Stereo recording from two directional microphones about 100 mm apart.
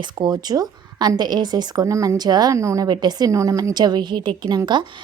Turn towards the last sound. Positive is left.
turn(degrees=-50)  # may be behind; listen again after turning